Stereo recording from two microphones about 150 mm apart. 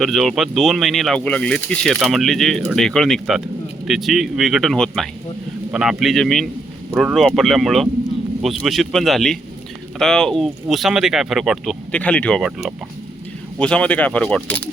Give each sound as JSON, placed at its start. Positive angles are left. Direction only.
{"t": 0.0, "sound": "speech", "side_deg": 0}
{"t": 13.6, "sound": "speech", "side_deg": 5}